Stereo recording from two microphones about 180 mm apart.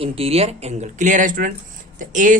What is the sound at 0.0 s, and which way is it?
A man's voice, 35° right (ahead or behind).